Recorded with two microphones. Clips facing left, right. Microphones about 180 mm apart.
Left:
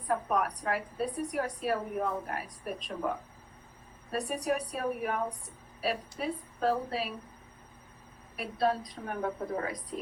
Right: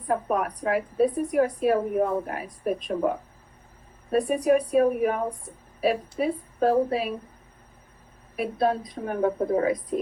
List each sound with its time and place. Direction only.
0.1 s a woman's voice: 50° right (ahead or behind)
4.1 s a woman's voice: 50° right (ahead or behind)
8.4 s a woman's voice: 50° right (ahead or behind)